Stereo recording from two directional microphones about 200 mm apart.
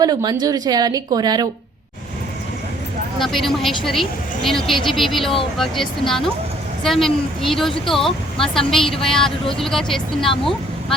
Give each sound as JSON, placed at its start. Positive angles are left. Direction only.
{"t": 0.0, "sound": "a woman's voice", "side_deg": -20}
{"t": 3.2, "sound": "speech", "side_deg": 0}